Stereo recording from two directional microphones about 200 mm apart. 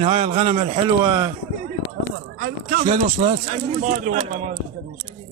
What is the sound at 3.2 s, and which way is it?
Speech, 35° right (ahead or behind).